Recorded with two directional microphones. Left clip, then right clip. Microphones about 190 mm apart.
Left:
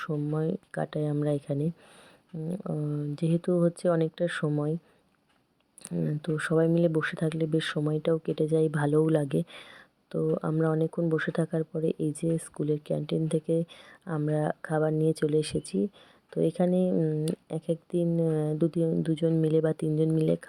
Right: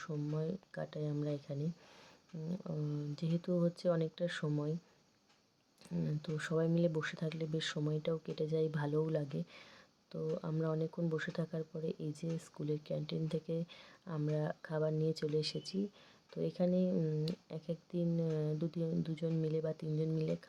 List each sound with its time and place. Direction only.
0.0 s speech: 35° left (ahead or behind)
5.9 s speech: 25° left (ahead or behind)